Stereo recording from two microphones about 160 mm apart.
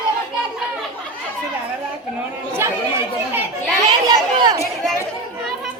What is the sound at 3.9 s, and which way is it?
Speech, 25° right (ahead or behind).